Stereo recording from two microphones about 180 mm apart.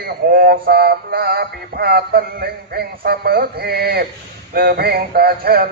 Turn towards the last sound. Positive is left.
turn(degrees=-55)  # may be behind; listen again after turning